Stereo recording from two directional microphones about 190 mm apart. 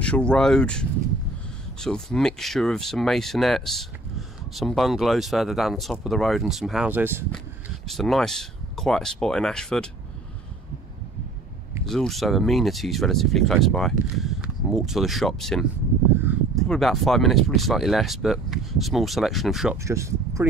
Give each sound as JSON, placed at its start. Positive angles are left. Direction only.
{"t": 0.0, "sound": "speech", "side_deg": 5}
{"t": 7.9, "sound": "speech", "side_deg": 0}
{"t": 11.8, "sound": "speech", "side_deg": 0}
{"t": 19.8, "sound": "speech", "side_deg": -15}